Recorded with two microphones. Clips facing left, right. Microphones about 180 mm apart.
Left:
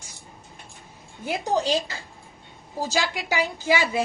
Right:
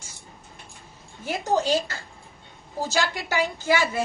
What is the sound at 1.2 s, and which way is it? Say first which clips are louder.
A woman's voice: even; 15° left (ahead or behind).